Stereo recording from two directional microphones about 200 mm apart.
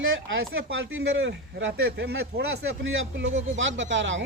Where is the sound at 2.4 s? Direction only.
70° right (ahead or behind).